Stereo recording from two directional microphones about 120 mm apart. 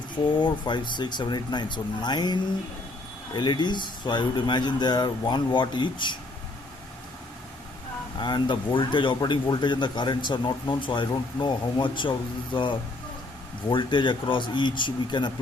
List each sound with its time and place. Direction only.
0.3 s speech: 40° left (ahead or behind)
8.2 s speech: 40° left (ahead or behind)
13.7 s speech: 40° left (ahead or behind)